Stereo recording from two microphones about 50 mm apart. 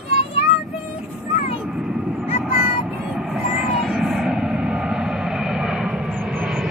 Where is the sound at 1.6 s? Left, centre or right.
Centre.